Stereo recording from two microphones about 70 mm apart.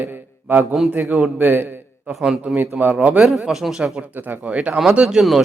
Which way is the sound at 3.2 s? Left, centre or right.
Centre.